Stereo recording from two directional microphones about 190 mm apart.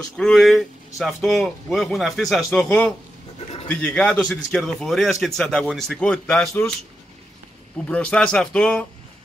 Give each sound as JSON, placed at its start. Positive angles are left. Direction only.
{"t": 0.2, "sound": "speech", "side_deg": 0}
{"t": 3.3, "sound": "a sound", "side_deg": 30}
{"t": 3.6, "sound": "speech", "side_deg": 5}
{"t": 7.9, "sound": "speech", "side_deg": 5}